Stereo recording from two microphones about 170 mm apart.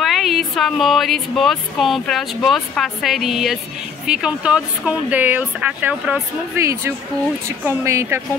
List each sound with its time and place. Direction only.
0.0 s speech: centre (ahead or behind); by 8.2 s 15° right (ahead or behind)